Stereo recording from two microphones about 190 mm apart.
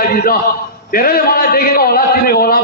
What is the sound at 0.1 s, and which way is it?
A man's voice, 50° left (ahead or behind).